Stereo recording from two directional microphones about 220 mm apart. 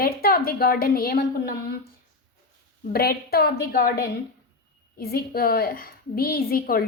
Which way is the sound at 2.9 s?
45° left (ahead or behind).